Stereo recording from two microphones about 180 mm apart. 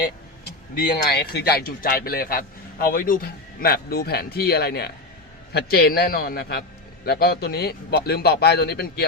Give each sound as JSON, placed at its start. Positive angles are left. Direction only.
{"t": 1.1, "sound": "a man's voice", "side_deg": 65}